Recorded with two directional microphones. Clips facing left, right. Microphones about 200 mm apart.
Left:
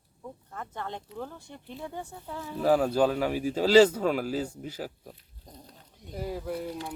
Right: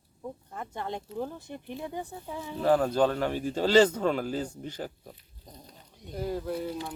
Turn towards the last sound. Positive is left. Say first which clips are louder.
# right 2 dB
turn(degrees=5)  # may be behind; listen again after turning